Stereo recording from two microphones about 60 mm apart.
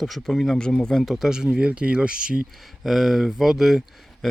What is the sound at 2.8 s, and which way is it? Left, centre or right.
Speech, centre.